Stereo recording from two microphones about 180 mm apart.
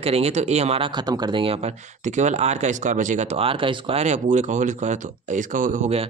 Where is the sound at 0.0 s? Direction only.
35° right (ahead or behind).